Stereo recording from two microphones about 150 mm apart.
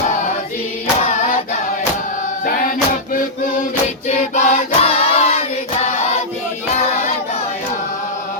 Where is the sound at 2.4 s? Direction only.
65° left (ahead or behind).